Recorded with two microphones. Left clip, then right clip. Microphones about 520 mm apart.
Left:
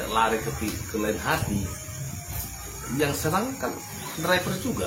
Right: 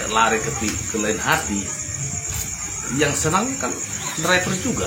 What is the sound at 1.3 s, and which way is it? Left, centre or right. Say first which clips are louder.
Speech: right 7 dB; left.